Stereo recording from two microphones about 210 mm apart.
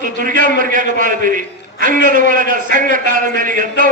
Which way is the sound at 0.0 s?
40° right (ahead or behind).